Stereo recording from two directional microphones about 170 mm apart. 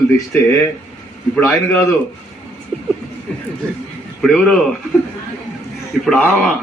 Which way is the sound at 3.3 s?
5° left (ahead or behind).